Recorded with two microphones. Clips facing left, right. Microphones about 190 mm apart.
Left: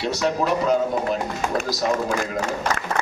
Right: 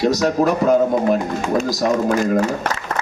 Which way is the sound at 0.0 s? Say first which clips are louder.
Right 6 dB; 40° right (ahead or behind).